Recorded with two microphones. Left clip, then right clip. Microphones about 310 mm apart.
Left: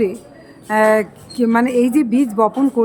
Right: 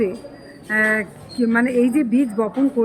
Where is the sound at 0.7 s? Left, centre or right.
Centre.